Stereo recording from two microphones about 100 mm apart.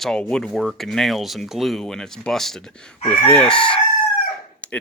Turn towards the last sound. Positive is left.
turn(degrees=15)  # may be behind; listen again after turning